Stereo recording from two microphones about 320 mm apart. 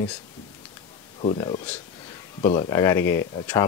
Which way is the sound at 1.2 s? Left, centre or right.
Centre.